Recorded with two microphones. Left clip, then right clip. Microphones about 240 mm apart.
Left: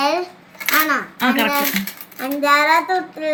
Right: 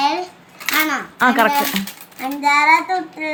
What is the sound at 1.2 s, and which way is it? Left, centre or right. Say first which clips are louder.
Speech: right 5 dB; centre.